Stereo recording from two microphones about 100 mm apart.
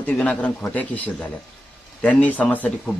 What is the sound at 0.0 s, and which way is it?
Speech, 15° left (ahead or behind).